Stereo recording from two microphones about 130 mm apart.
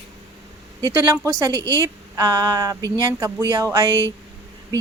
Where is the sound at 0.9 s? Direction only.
25° right (ahead or behind).